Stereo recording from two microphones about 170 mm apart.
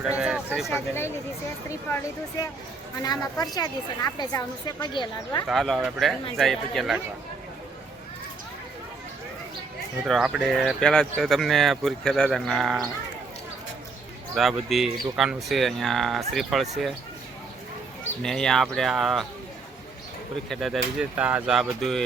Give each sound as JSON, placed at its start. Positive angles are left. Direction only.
{"t": 0.0, "sound": "a sound", "side_deg": -5}
{"t": 0.7, "sound": "a woman's voice", "side_deg": 15}
{"t": 5.5, "sound": "speech", "side_deg": 0}
{"t": 10.1, "sound": "speech", "side_deg": 0}
{"t": 14.3, "sound": "speech", "side_deg": 0}
{"t": 18.2, "sound": "speech", "side_deg": 5}
{"t": 20.5, "sound": "speech", "side_deg": 0}